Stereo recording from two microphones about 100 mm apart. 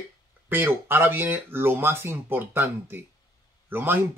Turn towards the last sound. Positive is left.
turn(degrees=-20)  # may be behind; listen again after turning